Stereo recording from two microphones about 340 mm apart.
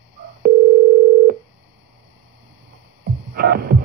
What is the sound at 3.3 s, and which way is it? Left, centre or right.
Music, right.